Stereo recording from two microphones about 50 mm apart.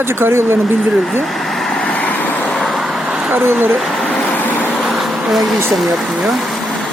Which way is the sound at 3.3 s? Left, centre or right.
Right.